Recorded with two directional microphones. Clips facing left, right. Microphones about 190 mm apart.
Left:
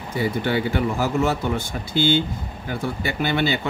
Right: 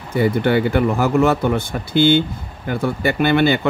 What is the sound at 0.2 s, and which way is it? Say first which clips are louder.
Speech: right 6 dB; 55° right (ahead or behind).